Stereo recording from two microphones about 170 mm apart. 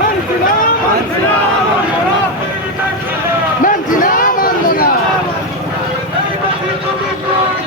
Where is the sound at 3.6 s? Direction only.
55° left (ahead or behind).